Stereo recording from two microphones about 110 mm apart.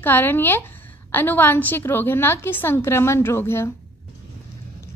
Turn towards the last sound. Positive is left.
turn(degrees=25)  # may be behind; listen again after turning